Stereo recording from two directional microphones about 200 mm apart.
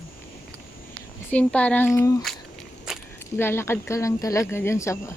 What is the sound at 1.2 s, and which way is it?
Speech, 5° left (ahead or behind).